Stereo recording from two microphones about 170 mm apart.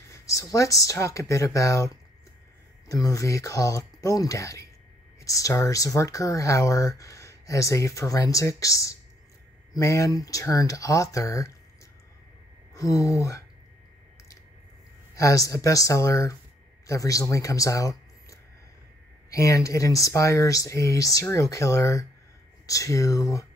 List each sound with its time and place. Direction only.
0.1 s speech: 20° left (ahead or behind)
2.9 s speech: 20° left (ahead or behind)
12.7 s speech: 20° left (ahead or behind)
15.1 s speech: 20° left (ahead or behind)